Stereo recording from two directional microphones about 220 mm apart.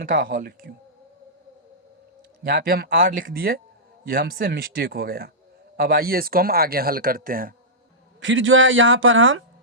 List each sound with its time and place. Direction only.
0.0 s speech: 40° right (ahead or behind)
2.4 s speech: 45° right (ahead or behind)
8.2 s speech: 60° right (ahead or behind)